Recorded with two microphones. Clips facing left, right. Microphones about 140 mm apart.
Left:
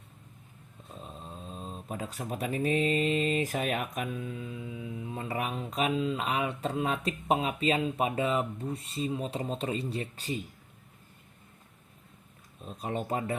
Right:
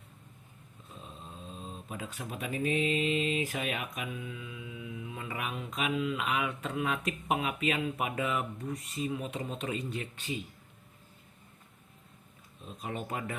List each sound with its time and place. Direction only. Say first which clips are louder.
1.5 s speech: left 4 dB; 40° left (ahead or behind)
12.6 s speech: left 5 dB; 35° left (ahead or behind)